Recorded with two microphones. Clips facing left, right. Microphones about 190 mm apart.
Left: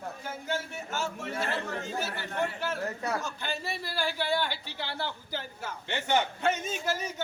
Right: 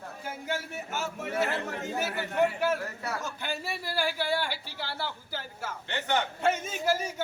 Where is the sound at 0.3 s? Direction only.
15° right (ahead or behind).